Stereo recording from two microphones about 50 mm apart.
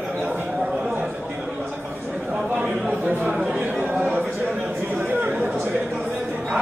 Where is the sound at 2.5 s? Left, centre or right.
Centre.